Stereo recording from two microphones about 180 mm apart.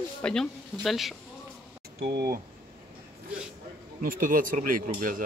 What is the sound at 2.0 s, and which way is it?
Speech, 60° right (ahead or behind).